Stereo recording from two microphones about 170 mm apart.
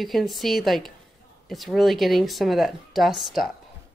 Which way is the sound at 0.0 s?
Centre (ahead or behind).